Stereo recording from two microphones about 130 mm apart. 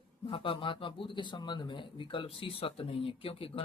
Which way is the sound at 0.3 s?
40° left (ahead or behind).